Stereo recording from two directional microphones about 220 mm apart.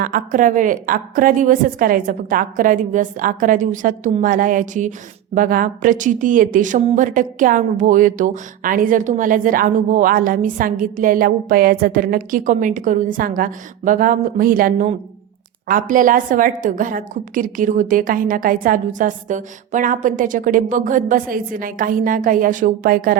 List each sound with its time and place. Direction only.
0.0 s a woman's voice: 40° right (ahead or behind)